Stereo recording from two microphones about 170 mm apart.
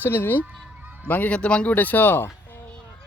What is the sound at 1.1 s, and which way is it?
Speech, 10° left (ahead or behind).